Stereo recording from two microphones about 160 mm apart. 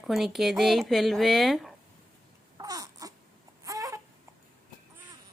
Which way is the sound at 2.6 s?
25° right (ahead or behind).